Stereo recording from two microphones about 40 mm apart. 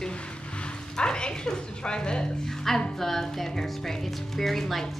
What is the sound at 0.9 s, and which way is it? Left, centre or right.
Dog, left.